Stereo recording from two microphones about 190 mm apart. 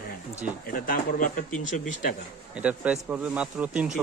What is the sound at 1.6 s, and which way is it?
Speech, 80° left.